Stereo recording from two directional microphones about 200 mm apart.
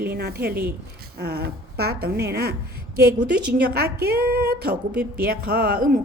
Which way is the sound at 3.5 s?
50° right (ahead or behind).